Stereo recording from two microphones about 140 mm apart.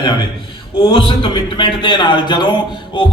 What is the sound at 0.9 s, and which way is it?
A man's voice, 40° left (ahead or behind).